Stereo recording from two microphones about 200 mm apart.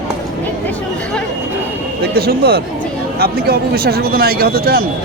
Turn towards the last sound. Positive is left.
turn(degrees=-50)  # may be behind; listen again after turning